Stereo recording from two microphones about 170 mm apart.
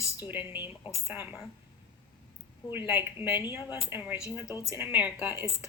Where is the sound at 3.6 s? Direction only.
25° left (ahead or behind).